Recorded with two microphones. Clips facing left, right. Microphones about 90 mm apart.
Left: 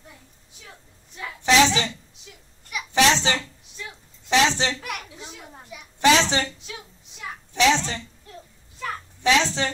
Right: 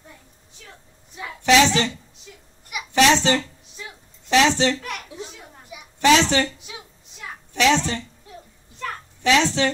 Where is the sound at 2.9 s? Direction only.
55° right (ahead or behind).